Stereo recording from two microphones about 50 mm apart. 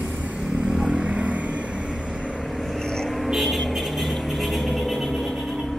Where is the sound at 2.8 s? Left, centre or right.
Centre.